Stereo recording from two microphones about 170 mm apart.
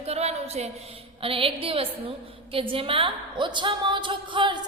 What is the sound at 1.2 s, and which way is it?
A woman's voice, 30° right (ahead or behind).